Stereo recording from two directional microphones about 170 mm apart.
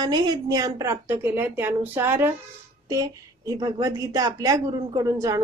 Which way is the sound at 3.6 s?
20° right (ahead or behind).